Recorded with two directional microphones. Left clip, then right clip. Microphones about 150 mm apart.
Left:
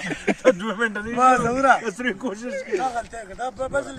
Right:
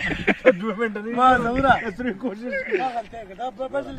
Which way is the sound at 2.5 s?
10° left (ahead or behind).